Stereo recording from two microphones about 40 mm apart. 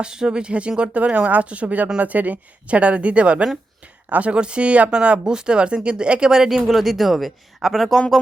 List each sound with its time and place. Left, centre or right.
0.0 s a woman's voice: right
6.3 s speech: centre
6.7 s speech: centre